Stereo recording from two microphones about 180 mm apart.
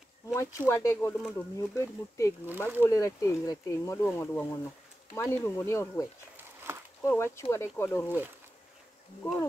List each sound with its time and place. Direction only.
0.3 s speech: 15° left (ahead or behind)
2.4 s speech: 10° right (ahead or behind)
2.8 s speech: 20° left (ahead or behind)
6.3 s a sound: 10° right (ahead or behind)
7.0 s speech: 15° left (ahead or behind)